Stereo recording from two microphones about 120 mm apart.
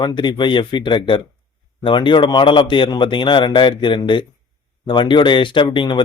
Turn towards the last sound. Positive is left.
turn(degrees=40)  # may be behind; listen again after turning